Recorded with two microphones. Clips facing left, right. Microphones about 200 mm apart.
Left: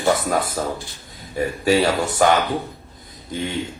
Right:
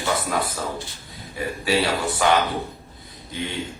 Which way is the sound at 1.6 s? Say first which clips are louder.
Left 4 dB; 45° left (ahead or behind).